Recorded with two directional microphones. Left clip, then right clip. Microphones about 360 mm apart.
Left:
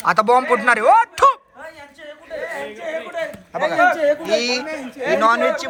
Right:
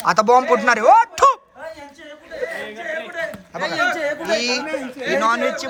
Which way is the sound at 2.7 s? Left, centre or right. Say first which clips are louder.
Left 1 dB; centre.